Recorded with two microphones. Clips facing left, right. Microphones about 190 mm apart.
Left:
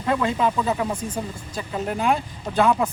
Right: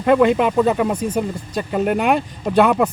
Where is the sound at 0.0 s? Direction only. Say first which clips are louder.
Right 8 dB; 70° right (ahead or behind).